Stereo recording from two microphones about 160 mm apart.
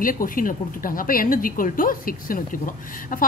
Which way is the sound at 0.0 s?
60° left (ahead or behind).